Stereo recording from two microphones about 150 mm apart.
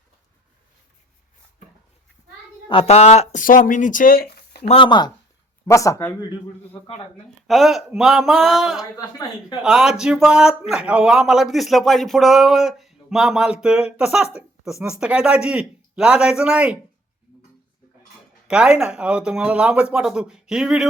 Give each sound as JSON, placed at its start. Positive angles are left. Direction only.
{"t": 2.6, "sound": "speech", "side_deg": 40}
{"t": 4.6, "sound": "a woman's voice", "side_deg": 35}
{"t": 7.4, "sound": "speech", "side_deg": 0}
{"t": 8.8, "sound": "a woman's voice", "side_deg": 25}
{"t": 9.6, "sound": "speech", "side_deg": -5}
{"t": 18.4, "sound": "speech", "side_deg": -5}